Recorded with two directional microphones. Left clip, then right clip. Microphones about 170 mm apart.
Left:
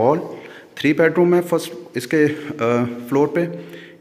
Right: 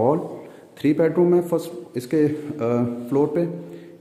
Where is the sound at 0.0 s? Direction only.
5° right (ahead or behind).